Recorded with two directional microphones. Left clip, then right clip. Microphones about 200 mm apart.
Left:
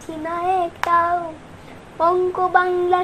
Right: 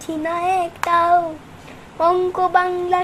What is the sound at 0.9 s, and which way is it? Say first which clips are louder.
A child's voice: right 4 dB; 10° right (ahead or behind).